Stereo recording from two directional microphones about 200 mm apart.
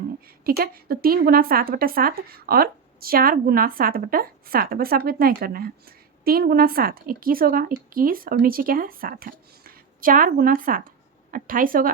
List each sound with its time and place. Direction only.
0.3 s a woman's voice: 50° right (ahead or behind)